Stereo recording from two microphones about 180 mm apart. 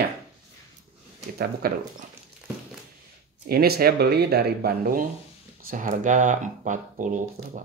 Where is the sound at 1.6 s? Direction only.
55° right (ahead or behind).